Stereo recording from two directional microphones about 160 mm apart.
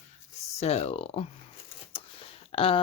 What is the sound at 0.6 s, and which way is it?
Speech, 40° left (ahead or behind).